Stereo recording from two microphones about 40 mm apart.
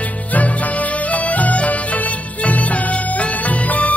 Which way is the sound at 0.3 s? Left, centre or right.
Left.